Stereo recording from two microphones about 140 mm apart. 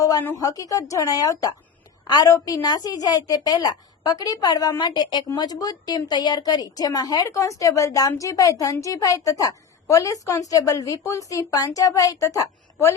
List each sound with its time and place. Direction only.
0.0 s a woman's voice: 25° left (ahead or behind)